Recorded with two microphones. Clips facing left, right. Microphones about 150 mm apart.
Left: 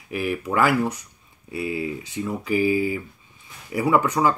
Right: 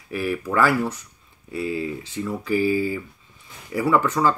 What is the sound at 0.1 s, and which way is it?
Speech, 15° left (ahead or behind).